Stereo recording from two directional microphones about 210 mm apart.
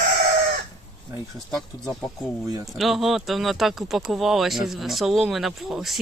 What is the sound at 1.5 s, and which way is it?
Speech, centre (ahead or behind).